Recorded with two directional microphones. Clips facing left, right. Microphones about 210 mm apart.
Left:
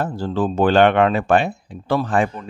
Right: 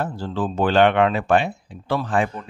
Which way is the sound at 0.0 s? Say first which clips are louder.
Left 4 dB; 45° left (ahead or behind).